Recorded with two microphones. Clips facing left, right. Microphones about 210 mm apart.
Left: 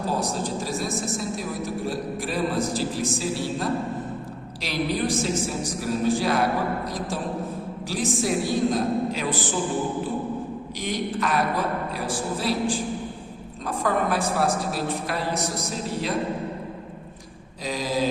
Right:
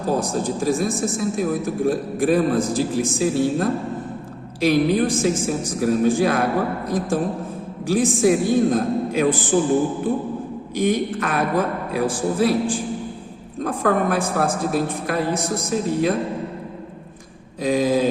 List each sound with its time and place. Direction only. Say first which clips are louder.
0.2 s a man's voice: right 5 dB; 50° right (ahead or behind)
10.8 s a man's voice: right 8 dB; 55° right (ahead or behind)
17.6 s a man's voice: right 7 dB; 50° right (ahead or behind)